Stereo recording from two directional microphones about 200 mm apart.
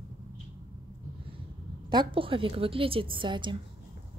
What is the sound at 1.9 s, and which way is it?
A woman's voice, 25° right (ahead or behind).